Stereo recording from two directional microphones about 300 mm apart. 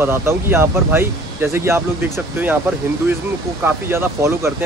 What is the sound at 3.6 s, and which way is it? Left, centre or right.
Speech, centre.